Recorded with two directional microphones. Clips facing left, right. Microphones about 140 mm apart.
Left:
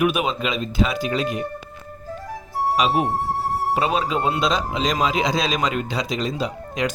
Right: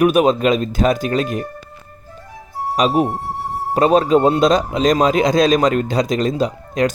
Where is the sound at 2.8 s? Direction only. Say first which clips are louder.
Right 6 dB; 40° right (ahead or behind).